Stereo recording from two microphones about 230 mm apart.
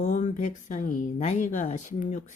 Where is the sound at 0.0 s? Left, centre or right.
Left.